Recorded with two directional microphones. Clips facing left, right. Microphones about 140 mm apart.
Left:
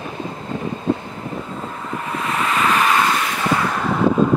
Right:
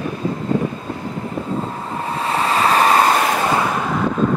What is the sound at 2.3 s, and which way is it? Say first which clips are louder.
Vehicle: right 2 dB; 35° right (ahead or behind).